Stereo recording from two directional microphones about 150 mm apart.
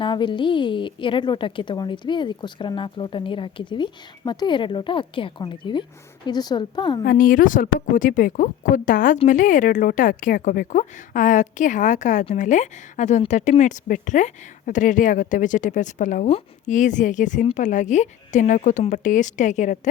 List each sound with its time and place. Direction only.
0.0 s a woman's voice: 30° left (ahead or behind)
7.0 s speech: 70° left (ahead or behind); by 19.9 s 55° left (ahead or behind)